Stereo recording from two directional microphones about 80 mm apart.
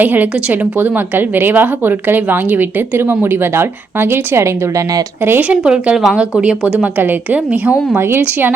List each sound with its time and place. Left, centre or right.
0.0 s a woman's voice: right
5.4 s a woman's voice: centre
7.9 s a woman's voice: right